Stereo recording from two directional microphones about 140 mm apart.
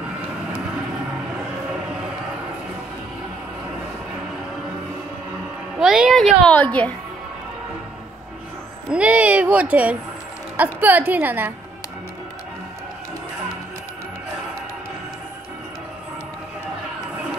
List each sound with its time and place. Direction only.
5.8 s a woman's voice: 5° right (ahead or behind)
8.9 s speech: 10° right (ahead or behind)